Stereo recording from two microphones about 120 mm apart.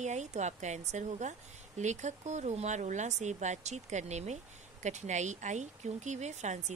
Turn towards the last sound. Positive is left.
turn(degrees=-75)  # may be behind; listen again after turning